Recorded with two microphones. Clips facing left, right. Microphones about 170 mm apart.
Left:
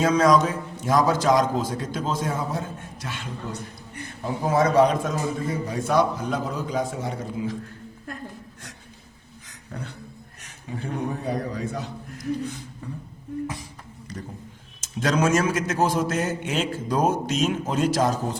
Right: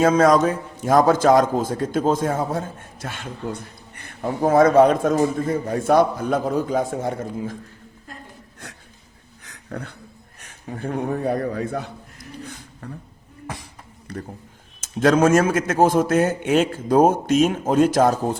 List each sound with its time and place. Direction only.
0.0 s a man's voice: 50° right (ahead or behind)
9.5 s a sound: 60° right (ahead or behind)
10.8 s a man's voice: 50° right (ahead or behind)
14.1 s a man's voice: 55° right (ahead or behind)